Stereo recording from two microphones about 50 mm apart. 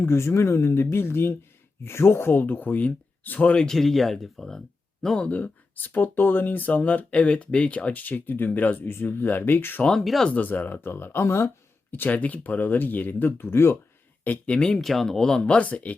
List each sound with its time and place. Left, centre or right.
0.0 s speech: left
3.7 s speech: centre
5.3 s speech: left
8.9 s speech: left
9.9 s speech: centre
10.2 s speech: left
10.8 s speech: left
11.9 s speech: left
14.3 s speech: left
14.6 s speech: centre
15.5 s speech: left